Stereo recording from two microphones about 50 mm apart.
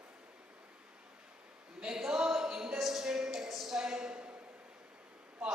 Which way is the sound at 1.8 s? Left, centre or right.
Centre.